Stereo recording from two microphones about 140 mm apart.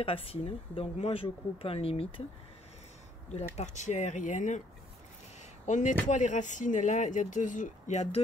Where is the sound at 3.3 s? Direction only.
55° left (ahead or behind).